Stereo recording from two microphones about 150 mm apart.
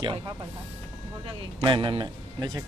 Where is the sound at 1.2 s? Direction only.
30° right (ahead or behind).